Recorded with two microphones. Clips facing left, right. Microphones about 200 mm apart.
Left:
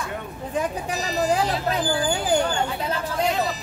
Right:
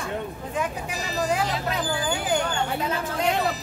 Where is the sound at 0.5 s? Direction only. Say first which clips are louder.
Left 4 dB; 35° left (ahead or behind).